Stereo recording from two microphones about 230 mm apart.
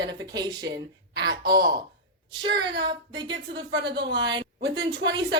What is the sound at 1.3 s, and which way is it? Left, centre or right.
Speech, right.